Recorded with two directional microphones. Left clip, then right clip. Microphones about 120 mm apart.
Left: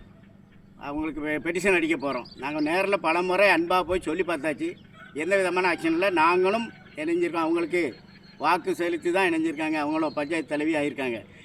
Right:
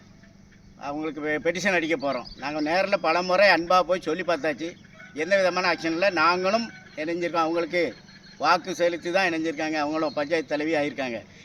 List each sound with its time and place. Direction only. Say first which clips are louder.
0.8 s speech: right 1 dB; 35° right (ahead or behind)